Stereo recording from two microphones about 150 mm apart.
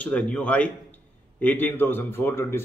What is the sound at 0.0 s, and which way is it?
A man's voice, 10° left (ahead or behind).